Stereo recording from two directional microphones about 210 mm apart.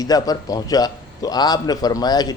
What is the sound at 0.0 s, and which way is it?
A man's voice, 15° left (ahead or behind).